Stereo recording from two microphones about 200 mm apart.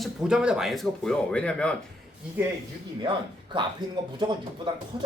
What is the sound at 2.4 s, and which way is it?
Speech, 10° right (ahead or behind).